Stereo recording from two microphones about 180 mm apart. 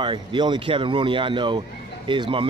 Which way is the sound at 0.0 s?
25° right (ahead or behind).